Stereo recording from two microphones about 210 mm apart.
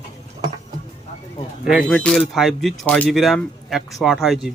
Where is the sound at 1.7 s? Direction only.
5° left (ahead or behind).